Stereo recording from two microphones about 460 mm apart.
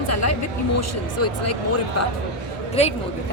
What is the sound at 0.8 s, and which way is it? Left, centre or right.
Speech, left.